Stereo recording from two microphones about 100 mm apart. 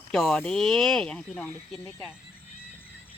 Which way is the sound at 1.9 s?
30° left (ahead or behind).